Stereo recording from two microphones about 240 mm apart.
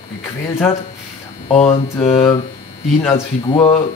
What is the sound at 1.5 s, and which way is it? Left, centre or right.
Speech, left.